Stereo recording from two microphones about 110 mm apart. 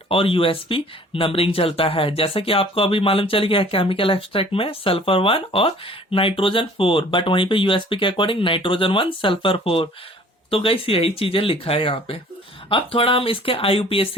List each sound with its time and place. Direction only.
0.1 s speech: 55° left (ahead or behind)